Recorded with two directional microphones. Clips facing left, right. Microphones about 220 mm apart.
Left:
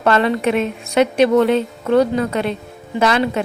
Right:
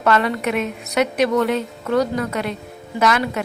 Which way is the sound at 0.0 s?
30° left (ahead or behind).